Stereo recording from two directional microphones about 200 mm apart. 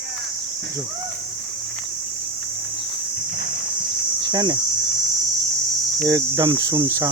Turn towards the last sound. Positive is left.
turn(degrees=-15)  # may be behind; listen again after turning